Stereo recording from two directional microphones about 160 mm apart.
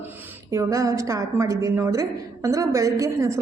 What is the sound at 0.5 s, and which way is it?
A man's voice, 20° right (ahead or behind).